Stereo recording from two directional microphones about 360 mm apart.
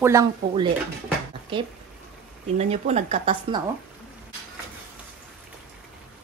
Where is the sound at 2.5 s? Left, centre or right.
Centre.